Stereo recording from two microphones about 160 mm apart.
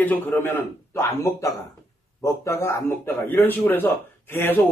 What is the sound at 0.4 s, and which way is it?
A man's voice, 15° left (ahead or behind).